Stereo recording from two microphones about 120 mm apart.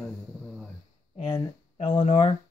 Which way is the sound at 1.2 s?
45° left (ahead or behind).